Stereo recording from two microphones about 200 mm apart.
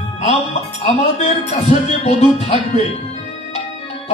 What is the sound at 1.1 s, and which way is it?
Speech, 35° left (ahead or behind).